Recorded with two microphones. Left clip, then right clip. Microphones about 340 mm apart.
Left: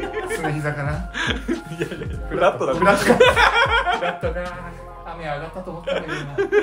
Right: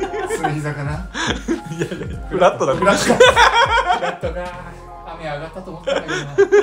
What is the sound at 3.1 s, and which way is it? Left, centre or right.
Snicker, centre.